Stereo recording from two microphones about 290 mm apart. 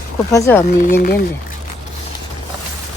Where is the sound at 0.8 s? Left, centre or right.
Left.